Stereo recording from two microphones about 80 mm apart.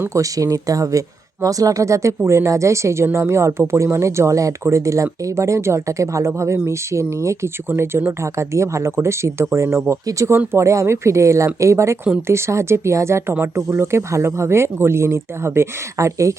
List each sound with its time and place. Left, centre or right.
0.1 s speech: right